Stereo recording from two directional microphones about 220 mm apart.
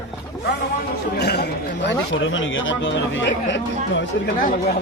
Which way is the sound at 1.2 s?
50° left (ahead or behind).